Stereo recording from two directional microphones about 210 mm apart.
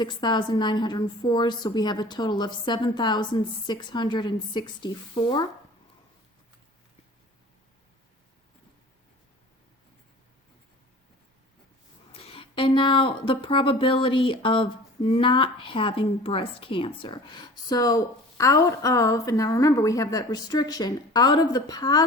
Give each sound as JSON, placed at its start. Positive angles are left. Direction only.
{"t": 0.0, "sound": "a woman's voice", "side_deg": 20}
{"t": 12.1, "sound": "a woman's voice", "side_deg": 25}